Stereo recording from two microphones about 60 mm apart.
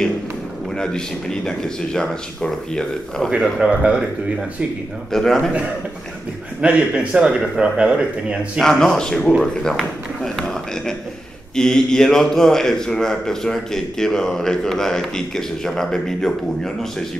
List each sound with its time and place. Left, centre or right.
0.7 s a man's voice: centre
3.5 s speech: centre
5.1 s a man's voice: centre
6.6 s speech: centre
8.5 s a man's voice: centre
9.4 s a sound: centre
11.5 s a man's voice: centre